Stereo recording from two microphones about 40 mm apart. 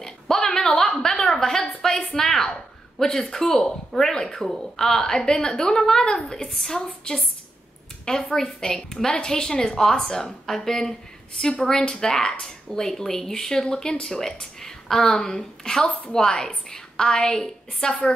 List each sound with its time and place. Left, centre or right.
0.0 s a sound: centre
3.0 s a woman's voice: centre
8.4 s a woman's voice: centre